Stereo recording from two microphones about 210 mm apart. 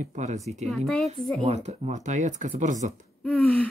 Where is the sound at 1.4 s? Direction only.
30° right (ahead or behind).